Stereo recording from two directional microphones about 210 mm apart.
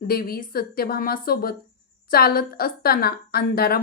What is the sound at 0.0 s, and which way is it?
Speech, 45° left (ahead or behind).